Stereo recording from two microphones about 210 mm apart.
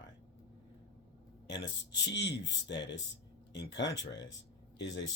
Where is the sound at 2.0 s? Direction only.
55° left (ahead or behind).